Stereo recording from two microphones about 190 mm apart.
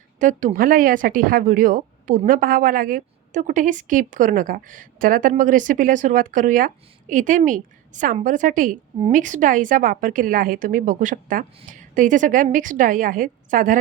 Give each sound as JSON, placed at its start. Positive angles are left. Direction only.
{"t": 0.2, "sound": "speech", "side_deg": -40}